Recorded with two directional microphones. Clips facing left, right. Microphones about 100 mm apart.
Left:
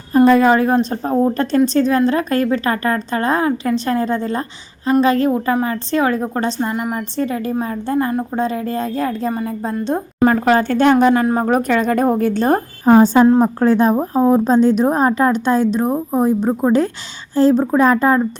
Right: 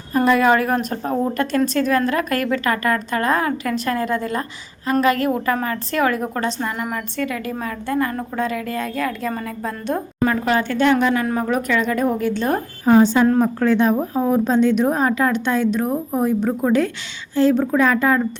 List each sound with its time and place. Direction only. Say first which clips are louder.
0.3 s a woman's voice: left 1 dB; 30° left (ahead or behind)
9.3 s a woman's voice: left 5 dB; 20° left (ahead or behind)
10.3 s a woman's voice: left 5 dB; 45° left (ahead or behind)